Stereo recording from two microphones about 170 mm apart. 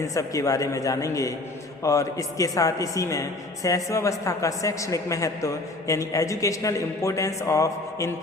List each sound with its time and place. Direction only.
0.0 s a woman's voice: 20° left (ahead or behind)